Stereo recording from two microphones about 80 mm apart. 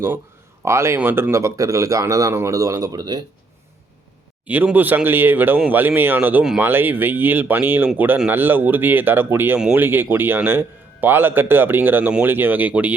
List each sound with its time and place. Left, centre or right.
0.6 s speech: right
4.4 s a man's voice: centre